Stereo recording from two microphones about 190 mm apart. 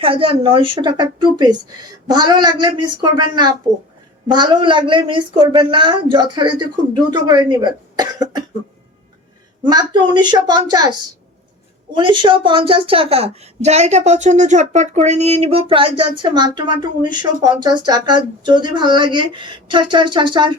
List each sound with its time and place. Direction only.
0.0 s a woman's voice: 30° right (ahead or behind)
9.6 s a woman's voice: 20° right (ahead or behind)
11.9 s a woman's voice: 25° right (ahead or behind)